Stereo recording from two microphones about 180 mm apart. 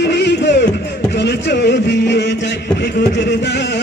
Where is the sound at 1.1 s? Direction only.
70° left (ahead or behind).